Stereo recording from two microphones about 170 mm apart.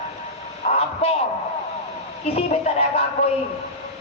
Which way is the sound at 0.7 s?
50° left (ahead or behind).